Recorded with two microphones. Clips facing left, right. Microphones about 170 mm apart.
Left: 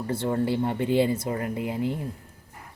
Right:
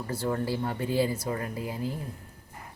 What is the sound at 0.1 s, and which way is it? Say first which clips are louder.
Speech: left 4 dB; 25° left (ahead or behind).